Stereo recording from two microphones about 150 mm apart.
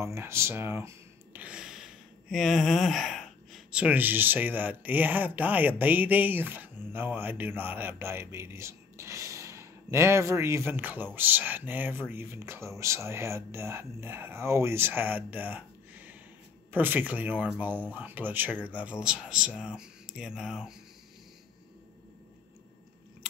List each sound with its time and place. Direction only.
0.0 s speech: 15° right (ahead or behind)